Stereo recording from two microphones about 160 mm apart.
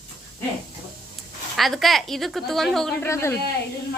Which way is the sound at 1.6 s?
Centre (ahead or behind).